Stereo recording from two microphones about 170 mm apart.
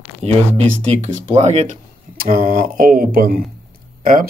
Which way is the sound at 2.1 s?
50° right (ahead or behind).